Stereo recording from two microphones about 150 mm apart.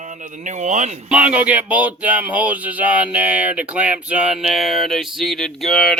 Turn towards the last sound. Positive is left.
turn(degrees=0)  # may be behind; listen again after turning